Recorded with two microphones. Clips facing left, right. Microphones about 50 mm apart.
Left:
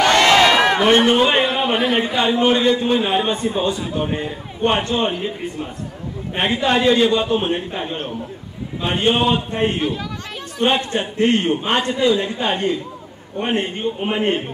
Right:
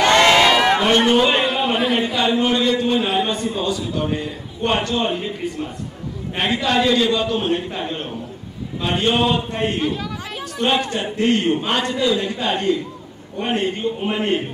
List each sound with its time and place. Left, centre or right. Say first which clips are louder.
0.3 s a sound: left 1 dB; centre
2.0 s a man's voice: left 2 dB; left
6.3 s a man's voice: left 1 dB; left; by 10.0 s centre
10.9 s a man's voice: left 1 dB; left